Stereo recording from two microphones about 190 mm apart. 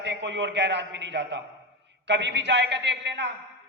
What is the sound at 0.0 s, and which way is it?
A man's voice, 65° right (ahead or behind).